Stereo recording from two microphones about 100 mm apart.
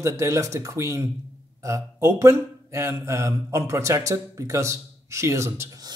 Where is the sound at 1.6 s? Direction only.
30° right (ahead or behind).